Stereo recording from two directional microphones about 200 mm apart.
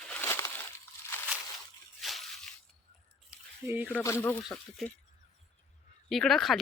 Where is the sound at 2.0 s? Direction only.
Centre (ahead or behind).